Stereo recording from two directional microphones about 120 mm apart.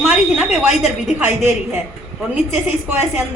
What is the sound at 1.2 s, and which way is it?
A woman's voice, 15° right (ahead or behind).